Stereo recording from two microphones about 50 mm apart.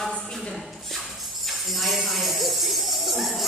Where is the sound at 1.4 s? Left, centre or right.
Centre.